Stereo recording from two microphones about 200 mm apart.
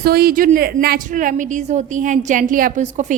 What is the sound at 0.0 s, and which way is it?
A woman's voice, 50° right (ahead or behind).